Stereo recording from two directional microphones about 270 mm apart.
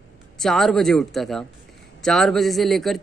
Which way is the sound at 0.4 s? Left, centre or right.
Centre.